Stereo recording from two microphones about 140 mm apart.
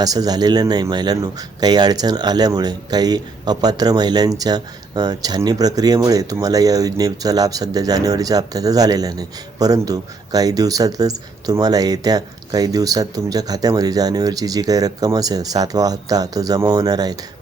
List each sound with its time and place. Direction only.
0.0 s speech: 25° right (ahead or behind)